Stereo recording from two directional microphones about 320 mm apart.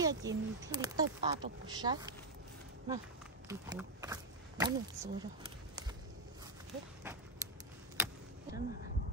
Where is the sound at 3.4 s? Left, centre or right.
Centre.